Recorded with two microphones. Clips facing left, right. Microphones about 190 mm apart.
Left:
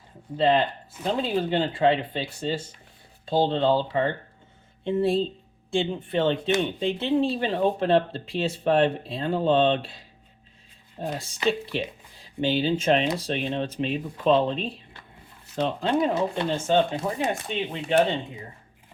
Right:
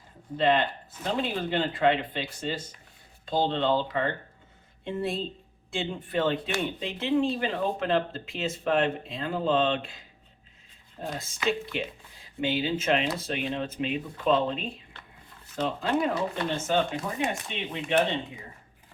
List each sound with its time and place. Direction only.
0.3 s speech: 30° left (ahead or behind)
11.2 s speech: 30° left (ahead or behind)